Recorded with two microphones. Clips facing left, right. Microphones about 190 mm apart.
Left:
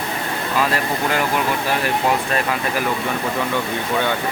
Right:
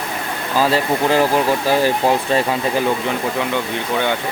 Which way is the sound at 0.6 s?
30° right (ahead or behind).